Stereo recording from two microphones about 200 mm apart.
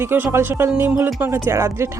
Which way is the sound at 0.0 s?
10° right (ahead or behind).